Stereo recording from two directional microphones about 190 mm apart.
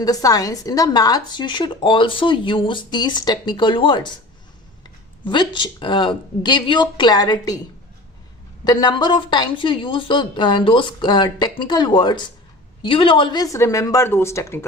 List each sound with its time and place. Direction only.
0.0 s speech: 20° left (ahead or behind)
5.2 s speech: 25° left (ahead or behind)
8.6 s speech: 20° left (ahead or behind)